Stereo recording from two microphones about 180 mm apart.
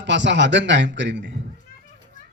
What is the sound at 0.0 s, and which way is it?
A man's voice, 90° right.